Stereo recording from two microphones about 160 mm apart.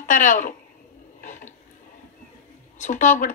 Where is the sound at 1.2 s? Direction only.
50° left (ahead or behind).